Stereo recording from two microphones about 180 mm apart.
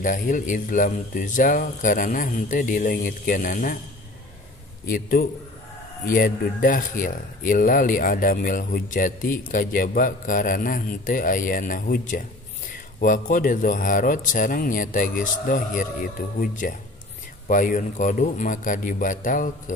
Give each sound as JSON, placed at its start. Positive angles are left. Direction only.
{"t": 0.0, "sound": "speech", "side_deg": 45}
{"t": 4.8, "sound": "speech", "side_deg": 50}